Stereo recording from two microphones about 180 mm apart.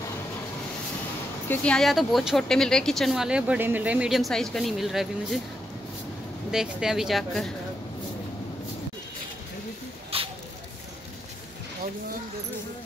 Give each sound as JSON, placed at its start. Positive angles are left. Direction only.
{"t": 1.5, "sound": "a woman's voice", "side_deg": 5}
{"t": 6.5, "sound": "a woman's voice", "side_deg": -5}
{"t": 10.1, "sound": "a sound", "side_deg": -30}